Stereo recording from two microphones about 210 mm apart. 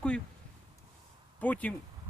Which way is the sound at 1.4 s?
5° left (ahead or behind).